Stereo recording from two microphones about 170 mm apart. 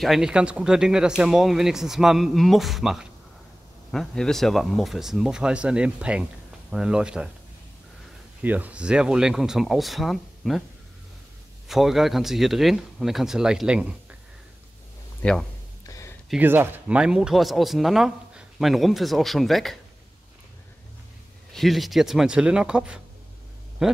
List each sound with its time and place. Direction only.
0.0 s speech: centre (ahead or behind)
8.4 s speech: 10° right (ahead or behind)
11.6 s speech: centre (ahead or behind)
15.2 s speech: 5° left (ahead or behind)
15.8 s a sound: 20° left (ahead or behind)
16.3 s speech: 10° right (ahead or behind)
21.5 s speech: centre (ahead or behind)